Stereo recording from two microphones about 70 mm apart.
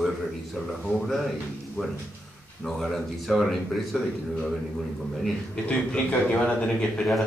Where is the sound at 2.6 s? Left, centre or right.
Centre.